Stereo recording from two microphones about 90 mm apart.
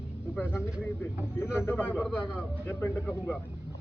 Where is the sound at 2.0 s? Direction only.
15° right (ahead or behind).